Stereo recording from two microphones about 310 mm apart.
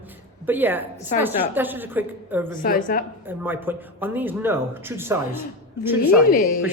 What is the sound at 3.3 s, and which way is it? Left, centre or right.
Speech, centre.